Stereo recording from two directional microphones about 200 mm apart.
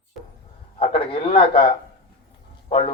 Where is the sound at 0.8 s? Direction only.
30° left (ahead or behind).